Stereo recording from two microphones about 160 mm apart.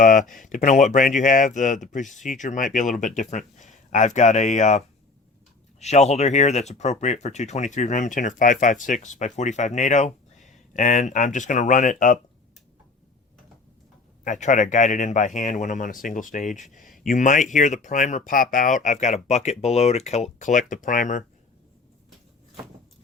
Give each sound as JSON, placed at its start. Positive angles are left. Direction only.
{"t": 0.0, "sound": "speech", "side_deg": 55}
{"t": 5.8, "sound": "speech", "side_deg": 45}
{"t": 14.3, "sound": "speech", "side_deg": 50}